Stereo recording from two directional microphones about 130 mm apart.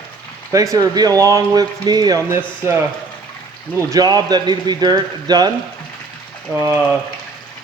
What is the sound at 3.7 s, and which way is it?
Speech, 30° right (ahead or behind).